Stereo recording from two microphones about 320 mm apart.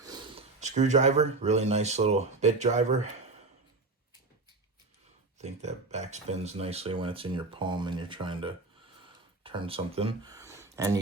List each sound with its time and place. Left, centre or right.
0.0 s speech: centre
5.4 s speech: right
9.0 s a sound: centre